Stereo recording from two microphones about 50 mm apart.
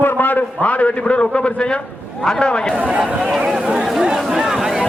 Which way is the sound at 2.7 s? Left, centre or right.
Right.